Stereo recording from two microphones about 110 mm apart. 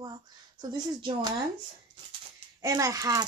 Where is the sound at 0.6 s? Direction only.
45° right (ahead or behind).